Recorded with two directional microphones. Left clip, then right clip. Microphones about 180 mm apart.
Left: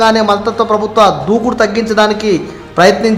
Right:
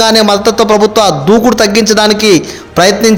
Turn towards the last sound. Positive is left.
turn(degrees=-25)  # may be behind; listen again after turning